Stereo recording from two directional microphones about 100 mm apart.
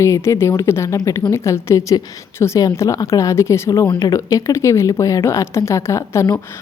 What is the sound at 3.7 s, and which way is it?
Speech, 40° left (ahead or behind).